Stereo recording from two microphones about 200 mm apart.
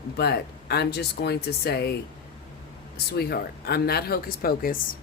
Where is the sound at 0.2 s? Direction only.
55° left (ahead or behind).